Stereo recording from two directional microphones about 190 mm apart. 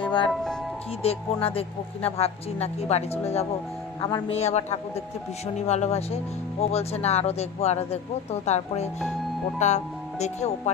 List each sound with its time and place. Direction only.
0.0 s music: 25° left (ahead or behind)
0.3 s speech: centre (ahead or behind)
1.0 s speech: 30° left (ahead or behind)